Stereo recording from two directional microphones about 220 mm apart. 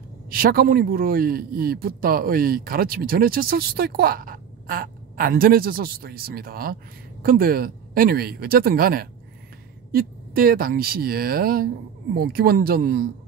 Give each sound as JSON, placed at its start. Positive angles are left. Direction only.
{"t": 0.3, "sound": "a man's voice", "side_deg": -40}